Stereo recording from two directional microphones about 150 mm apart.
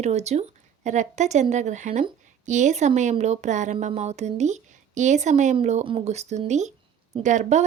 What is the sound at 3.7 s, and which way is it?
A woman's voice, 45° right (ahead or behind).